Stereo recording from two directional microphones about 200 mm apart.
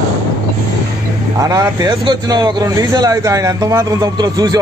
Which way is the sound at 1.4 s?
15° right (ahead or behind).